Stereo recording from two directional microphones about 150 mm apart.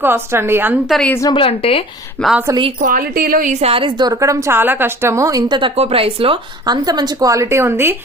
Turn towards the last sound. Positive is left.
turn(degrees=-15)  # may be behind; listen again after turning